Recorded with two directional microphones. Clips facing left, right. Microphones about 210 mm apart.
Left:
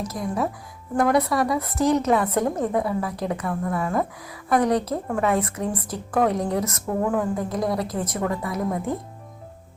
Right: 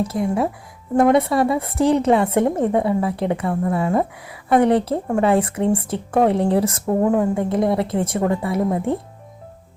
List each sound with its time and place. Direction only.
0.0 s speech: 30° right (ahead or behind)